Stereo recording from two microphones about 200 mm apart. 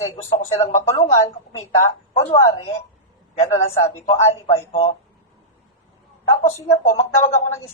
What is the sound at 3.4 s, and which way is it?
A woman's voice, 30° left (ahead or behind).